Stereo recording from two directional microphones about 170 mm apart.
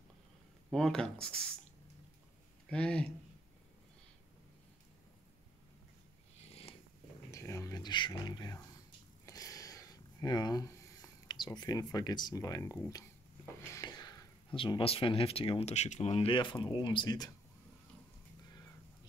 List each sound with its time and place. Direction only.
0.7 s speech: centre (ahead or behind)
2.7 s speech: 5° left (ahead or behind)
6.4 s purr: 35° left (ahead or behind)
7.2 s a sound: 20° left (ahead or behind)
13.7 s speech: 20° left (ahead or behind)